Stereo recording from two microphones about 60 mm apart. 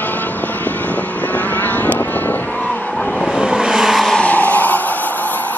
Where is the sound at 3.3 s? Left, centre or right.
Centre.